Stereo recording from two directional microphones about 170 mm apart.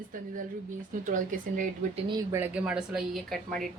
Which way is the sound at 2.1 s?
15° right (ahead or behind).